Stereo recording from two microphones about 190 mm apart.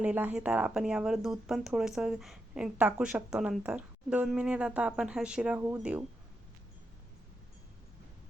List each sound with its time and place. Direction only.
0.0 s speech: 10° right (ahead or behind)